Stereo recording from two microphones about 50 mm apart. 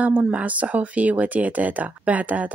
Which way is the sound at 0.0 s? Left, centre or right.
Right.